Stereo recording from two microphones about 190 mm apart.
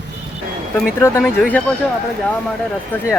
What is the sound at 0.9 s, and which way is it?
Speech, 15° left (ahead or behind).